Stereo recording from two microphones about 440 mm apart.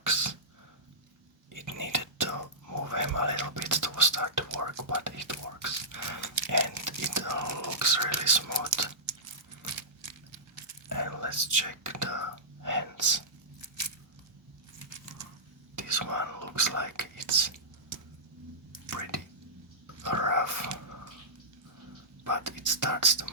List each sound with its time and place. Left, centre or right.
0.0 s sneeze: right
1.5 s whispering: right
10.8 s whispering: right
15.7 s whispering: right
18.9 s drip: right
20.0 s a sound: right
22.2 s whispering: right